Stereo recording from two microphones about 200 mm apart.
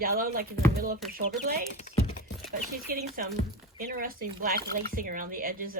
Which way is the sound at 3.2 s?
45° right (ahead or behind).